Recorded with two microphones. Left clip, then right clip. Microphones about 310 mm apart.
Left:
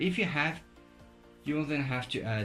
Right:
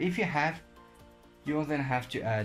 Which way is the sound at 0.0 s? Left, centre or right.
Centre.